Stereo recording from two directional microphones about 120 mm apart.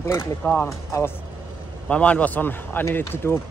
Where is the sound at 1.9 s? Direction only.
10° left (ahead or behind).